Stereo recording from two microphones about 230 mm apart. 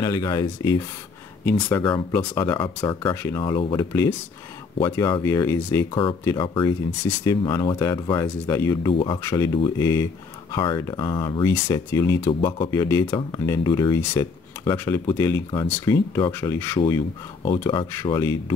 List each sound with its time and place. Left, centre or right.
0.0 s speech: centre